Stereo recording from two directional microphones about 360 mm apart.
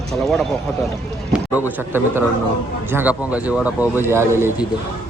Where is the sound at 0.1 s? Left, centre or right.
Centre.